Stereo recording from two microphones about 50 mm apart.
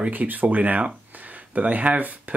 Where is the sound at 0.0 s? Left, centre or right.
Right.